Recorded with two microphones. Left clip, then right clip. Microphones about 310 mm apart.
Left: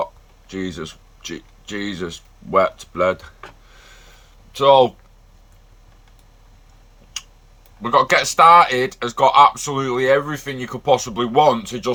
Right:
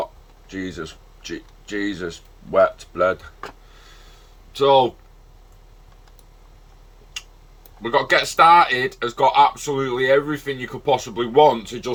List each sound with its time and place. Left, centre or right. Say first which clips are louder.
0.4 s speech: left 2 dB; centre
4.5 s speech: left 3 dB; centre
7.8 s speech: left 3 dB; centre